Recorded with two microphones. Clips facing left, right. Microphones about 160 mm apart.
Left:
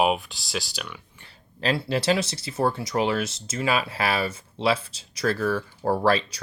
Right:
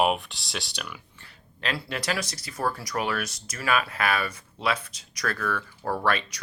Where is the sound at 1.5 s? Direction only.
30° left (ahead or behind).